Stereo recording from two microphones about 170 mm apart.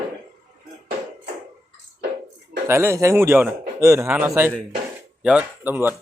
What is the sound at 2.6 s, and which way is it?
A man's voice, 15° right (ahead or behind).